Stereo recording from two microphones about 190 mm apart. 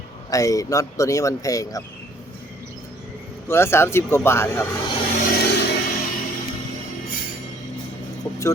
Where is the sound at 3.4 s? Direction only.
15° left (ahead or behind).